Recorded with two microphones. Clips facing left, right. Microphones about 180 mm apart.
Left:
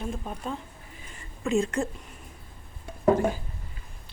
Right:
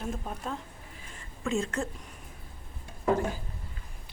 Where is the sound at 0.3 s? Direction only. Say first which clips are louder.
Left 2 dB; centre (ahead or behind).